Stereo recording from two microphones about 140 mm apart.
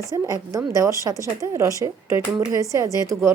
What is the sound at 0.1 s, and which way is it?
Speech, 25° right (ahead or behind).